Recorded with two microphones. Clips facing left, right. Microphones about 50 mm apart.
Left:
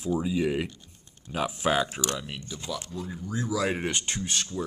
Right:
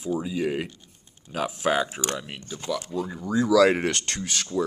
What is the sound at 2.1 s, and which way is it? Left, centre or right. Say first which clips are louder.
Speech: right 1 dB; centre.